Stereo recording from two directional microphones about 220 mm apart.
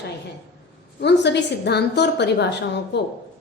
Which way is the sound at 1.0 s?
50° left (ahead or behind).